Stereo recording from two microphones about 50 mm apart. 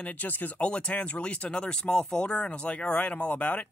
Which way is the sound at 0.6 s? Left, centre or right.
Left.